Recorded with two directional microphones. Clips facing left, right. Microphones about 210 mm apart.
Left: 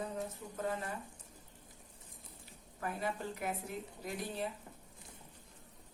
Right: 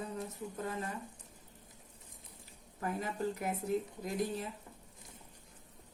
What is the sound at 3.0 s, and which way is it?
Speech, 40° right (ahead or behind).